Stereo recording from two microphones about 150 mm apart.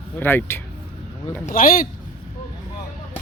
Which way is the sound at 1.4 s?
65° left (ahead or behind).